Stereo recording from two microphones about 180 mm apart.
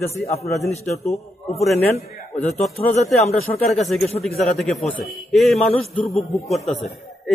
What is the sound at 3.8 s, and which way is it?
A man's voice, centre (ahead or behind).